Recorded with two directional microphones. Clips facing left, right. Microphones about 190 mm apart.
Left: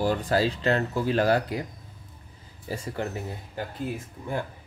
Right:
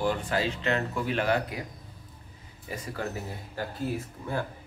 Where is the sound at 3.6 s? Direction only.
20° left (ahead or behind).